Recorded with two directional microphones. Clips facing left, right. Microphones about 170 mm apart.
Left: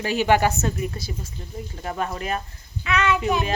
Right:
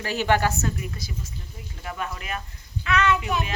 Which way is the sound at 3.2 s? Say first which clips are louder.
Left 5 dB; 35° left (ahead or behind).